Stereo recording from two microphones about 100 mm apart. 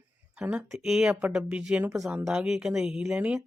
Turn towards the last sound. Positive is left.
turn(degrees=-15)  # may be behind; listen again after turning